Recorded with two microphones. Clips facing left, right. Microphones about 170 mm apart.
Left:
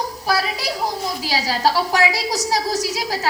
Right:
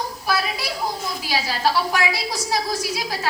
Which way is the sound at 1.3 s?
40° left (ahead or behind).